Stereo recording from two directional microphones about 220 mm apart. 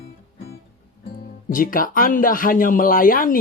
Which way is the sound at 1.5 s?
40° left (ahead or behind).